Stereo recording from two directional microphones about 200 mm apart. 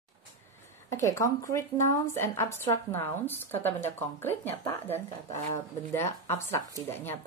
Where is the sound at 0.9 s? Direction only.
15° left (ahead or behind).